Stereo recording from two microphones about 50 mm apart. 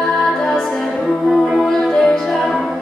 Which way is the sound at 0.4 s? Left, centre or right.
Centre.